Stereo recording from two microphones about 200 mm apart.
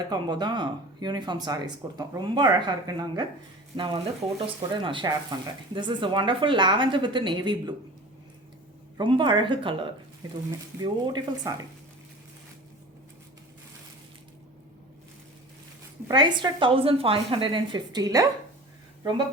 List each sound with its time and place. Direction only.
0.1 s speech: 20° right (ahead or behind)
9.0 s speech: 25° right (ahead or behind)
16.0 s speech: 20° right (ahead or behind)